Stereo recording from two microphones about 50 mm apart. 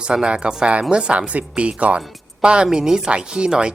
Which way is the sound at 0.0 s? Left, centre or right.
Centre.